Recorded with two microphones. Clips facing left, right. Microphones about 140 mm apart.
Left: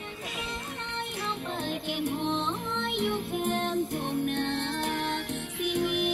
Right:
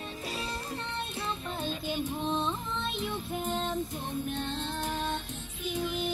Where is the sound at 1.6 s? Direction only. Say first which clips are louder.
Left 2 dB; 65° left (ahead or behind).